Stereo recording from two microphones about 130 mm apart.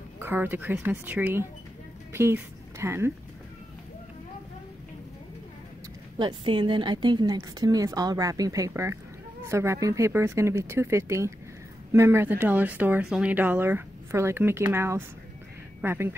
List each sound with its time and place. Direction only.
0.2 s speech: 15° right (ahead or behind)
6.1 s a woman's voice: 40° right (ahead or behind); by 16.2 s 20° right (ahead or behind)